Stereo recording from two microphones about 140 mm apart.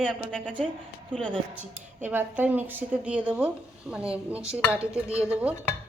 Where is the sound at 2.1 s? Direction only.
10° right (ahead or behind).